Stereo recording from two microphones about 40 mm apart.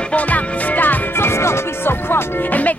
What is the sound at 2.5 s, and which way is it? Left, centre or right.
Music, left.